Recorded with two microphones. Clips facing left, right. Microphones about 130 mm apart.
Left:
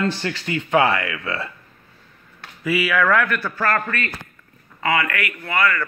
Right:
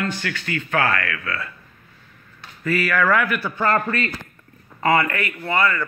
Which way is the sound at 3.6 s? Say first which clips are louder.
Right 3 dB; 25° right (ahead or behind).